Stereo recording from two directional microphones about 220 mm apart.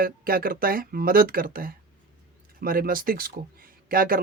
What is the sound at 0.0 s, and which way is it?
Speech, 40° right (ahead or behind).